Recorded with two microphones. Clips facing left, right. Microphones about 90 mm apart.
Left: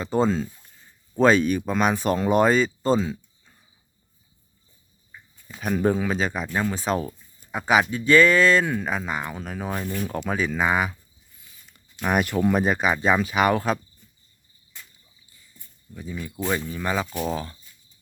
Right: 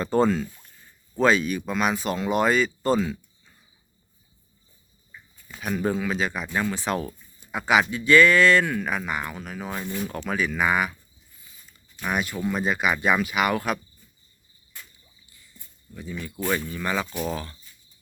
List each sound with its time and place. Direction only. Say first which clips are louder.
0.1 s speech: right 1 dB; 20° left (ahead or behind)
1.1 s speech: left 3 dB; 40° left (ahead or behind)
5.5 s speech: left 3 dB; 35° left (ahead or behind)
12.0 s speech: left 5 dB; 50° left (ahead or behind); by 13.7 s 35° left (ahead or behind)
16.3 s speech: even; 5° left (ahead or behind)
16.6 s speech: left 1 dB; 20° left (ahead or behind)